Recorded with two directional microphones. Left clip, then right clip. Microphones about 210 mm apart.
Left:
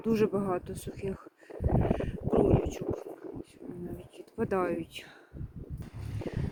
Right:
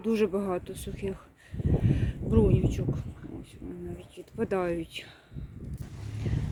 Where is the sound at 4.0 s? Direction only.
Centre (ahead or behind).